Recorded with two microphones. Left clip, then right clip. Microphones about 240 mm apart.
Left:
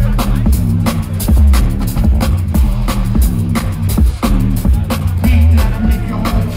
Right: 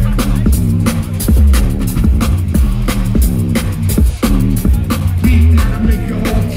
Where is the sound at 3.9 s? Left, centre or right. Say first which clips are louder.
Right 2 dB; right.